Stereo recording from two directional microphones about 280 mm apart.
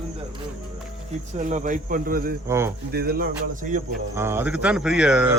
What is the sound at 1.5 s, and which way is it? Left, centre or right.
Speech, right.